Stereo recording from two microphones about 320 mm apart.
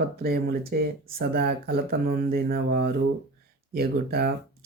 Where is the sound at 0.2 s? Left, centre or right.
Right.